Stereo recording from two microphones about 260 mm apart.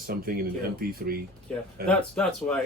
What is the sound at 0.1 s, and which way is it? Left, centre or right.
Speech, right.